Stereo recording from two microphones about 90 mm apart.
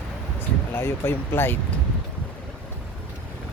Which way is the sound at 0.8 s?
25° left (ahead or behind).